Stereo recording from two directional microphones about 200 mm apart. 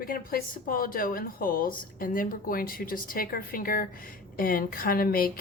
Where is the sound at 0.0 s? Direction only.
45° left (ahead or behind).